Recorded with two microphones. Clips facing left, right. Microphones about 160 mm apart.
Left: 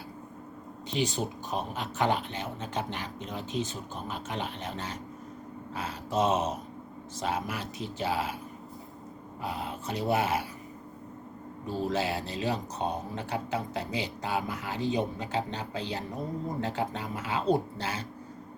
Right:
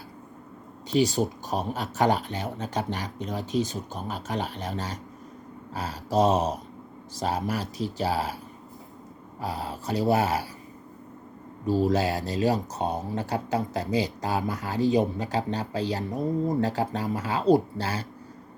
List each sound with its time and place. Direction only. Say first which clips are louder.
0.9 s speech: right 7 dB; 40° right (ahead or behind)
5.7 s a sound: right 5 dB; 35° right (ahead or behind)
7.2 s speech: right 4 dB; 35° right (ahead or behind)
9.4 s speech: right 3 dB; 35° right (ahead or behind)
11.9 s speech: right 5 dB; 40° right (ahead or behind)